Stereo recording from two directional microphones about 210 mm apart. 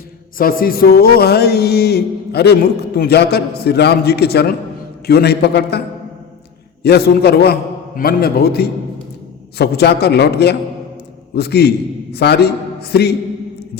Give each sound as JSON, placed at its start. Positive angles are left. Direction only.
{"t": 0.3, "sound": "speech", "side_deg": 45}
{"t": 6.8, "sound": "a man's voice", "side_deg": 50}